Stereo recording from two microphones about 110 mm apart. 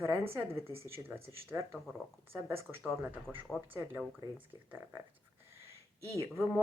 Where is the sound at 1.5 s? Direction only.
25° right (ahead or behind).